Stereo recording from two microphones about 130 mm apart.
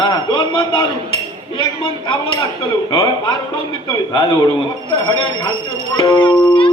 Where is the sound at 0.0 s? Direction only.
40° left (ahead or behind).